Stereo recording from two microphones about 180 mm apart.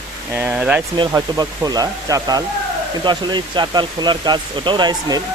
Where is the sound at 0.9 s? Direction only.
25° right (ahead or behind).